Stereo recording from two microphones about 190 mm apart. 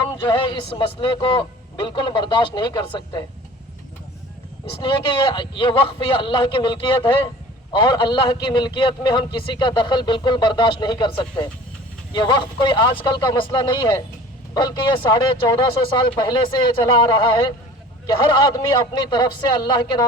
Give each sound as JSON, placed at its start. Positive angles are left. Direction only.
{"t": 0.3, "sound": "a man's voice", "side_deg": 25}
{"t": 4.8, "sound": "a man's voice", "side_deg": 25}